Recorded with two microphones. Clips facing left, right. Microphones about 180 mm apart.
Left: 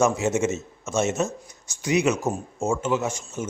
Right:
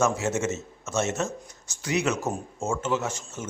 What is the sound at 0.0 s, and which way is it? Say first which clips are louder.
A man's voice: left 3 dB; 15° left (ahead or behind).